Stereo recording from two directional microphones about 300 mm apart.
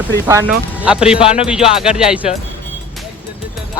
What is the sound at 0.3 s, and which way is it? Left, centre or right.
Speech, centre.